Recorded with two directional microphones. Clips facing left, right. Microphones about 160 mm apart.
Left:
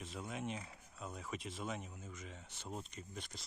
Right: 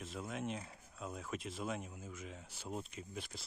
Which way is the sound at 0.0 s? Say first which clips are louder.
Right 2 dB; centre (ahead or behind).